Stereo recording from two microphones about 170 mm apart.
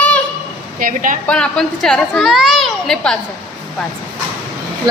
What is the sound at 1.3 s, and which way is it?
A woman's voice, 5° left (ahead or behind).